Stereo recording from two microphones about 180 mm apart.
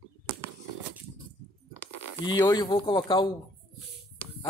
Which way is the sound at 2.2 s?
25° left (ahead or behind).